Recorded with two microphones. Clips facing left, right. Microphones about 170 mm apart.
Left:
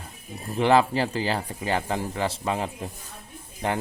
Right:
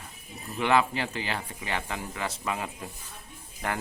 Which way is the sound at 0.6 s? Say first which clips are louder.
Left 5 dB; 35° left (ahead or behind).